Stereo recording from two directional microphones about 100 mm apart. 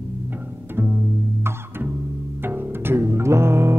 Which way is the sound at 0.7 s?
20° right (ahead or behind).